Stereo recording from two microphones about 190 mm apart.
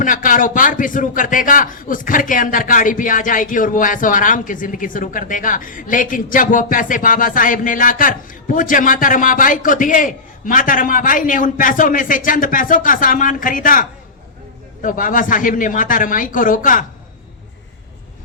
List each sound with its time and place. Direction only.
0.0 s a man's voice: 45° left (ahead or behind)